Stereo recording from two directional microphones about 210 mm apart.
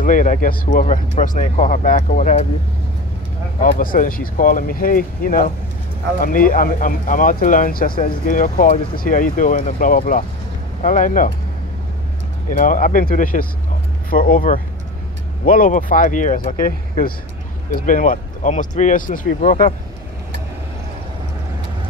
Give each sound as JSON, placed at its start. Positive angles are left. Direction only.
{"t": 0.0, "sound": "speech", "side_deg": 35}
{"t": 3.7, "sound": "speech", "side_deg": 40}
{"t": 12.5, "sound": "speech", "side_deg": 40}